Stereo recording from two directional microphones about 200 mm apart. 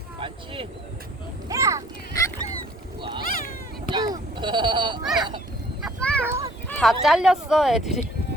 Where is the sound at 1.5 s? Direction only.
15° right (ahead or behind).